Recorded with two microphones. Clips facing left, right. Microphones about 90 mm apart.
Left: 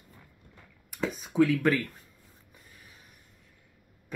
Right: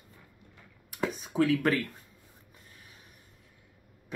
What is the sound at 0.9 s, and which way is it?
Speech, centre (ahead or behind).